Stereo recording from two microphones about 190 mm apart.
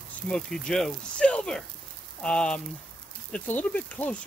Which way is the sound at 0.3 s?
5° left (ahead or behind).